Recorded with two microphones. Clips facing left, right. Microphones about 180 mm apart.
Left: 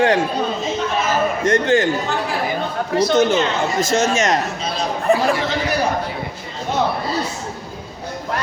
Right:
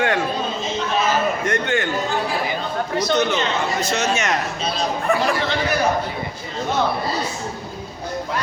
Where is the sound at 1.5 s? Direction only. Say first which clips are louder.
Left 6 dB; 35° left (ahead or behind).